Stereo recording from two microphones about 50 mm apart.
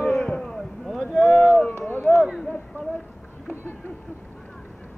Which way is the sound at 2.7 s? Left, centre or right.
Right.